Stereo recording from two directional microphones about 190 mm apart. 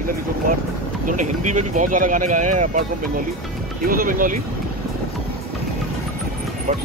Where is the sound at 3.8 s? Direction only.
50° right (ahead or behind).